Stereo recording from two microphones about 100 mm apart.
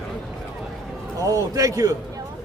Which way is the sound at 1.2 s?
35° right (ahead or behind).